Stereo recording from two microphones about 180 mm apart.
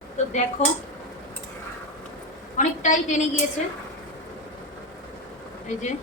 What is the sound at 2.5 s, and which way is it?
Speech, 45° left (ahead or behind).